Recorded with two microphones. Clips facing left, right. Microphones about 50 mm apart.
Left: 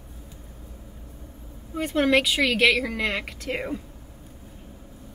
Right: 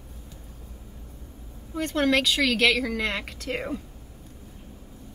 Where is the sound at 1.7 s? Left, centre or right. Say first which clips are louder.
Left 2 dB; centre.